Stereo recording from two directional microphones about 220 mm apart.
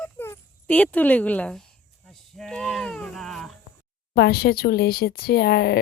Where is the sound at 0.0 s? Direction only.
5° left (ahead or behind).